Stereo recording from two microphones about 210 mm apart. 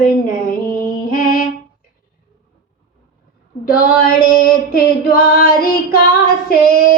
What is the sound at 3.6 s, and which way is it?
Female singing, 45° left (ahead or behind).